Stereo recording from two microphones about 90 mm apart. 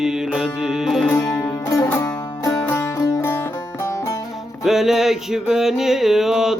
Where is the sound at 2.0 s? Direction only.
40° left (ahead or behind).